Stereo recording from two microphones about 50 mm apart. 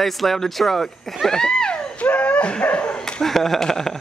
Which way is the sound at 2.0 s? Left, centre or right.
Left.